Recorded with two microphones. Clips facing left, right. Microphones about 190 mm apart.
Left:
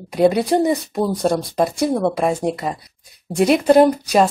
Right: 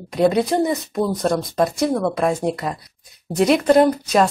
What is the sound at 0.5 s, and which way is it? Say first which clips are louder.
Speech: left 2 dB; 20° left (ahead or behind).